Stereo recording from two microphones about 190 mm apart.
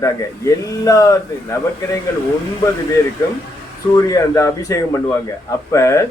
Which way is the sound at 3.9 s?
20° left (ahead or behind).